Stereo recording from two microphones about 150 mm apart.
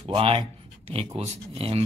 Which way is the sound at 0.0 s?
35° right (ahead or behind).